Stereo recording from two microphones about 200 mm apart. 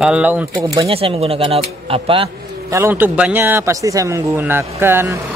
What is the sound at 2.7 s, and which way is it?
Speech, 10° right (ahead or behind).